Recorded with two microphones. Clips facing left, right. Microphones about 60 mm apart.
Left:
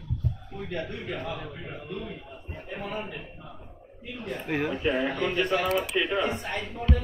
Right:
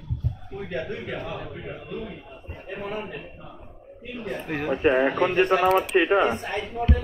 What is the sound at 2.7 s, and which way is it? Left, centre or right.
Speech, right.